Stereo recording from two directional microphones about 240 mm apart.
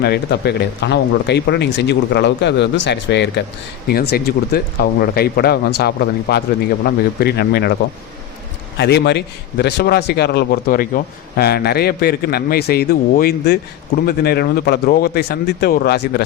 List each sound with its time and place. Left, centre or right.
0.0 s a man's voice: left
8.8 s a man's voice: left